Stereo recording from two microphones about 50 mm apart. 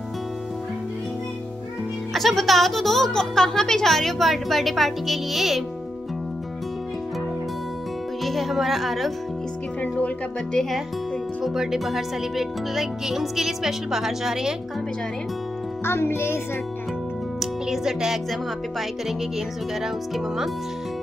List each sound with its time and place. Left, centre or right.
2.1 s speech: centre
8.2 s music: centre
9.8 s music: left
11.4 s speech: centre
15.8 s a child's voice: left
17.4 s music: centre